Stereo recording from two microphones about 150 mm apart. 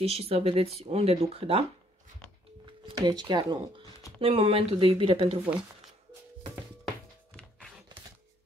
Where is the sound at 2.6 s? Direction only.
30° right (ahead or behind).